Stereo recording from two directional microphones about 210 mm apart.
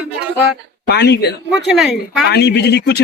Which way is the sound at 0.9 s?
50° left (ahead or behind).